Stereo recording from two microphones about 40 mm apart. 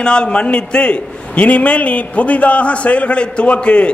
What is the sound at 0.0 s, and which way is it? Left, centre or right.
A man's voice, left.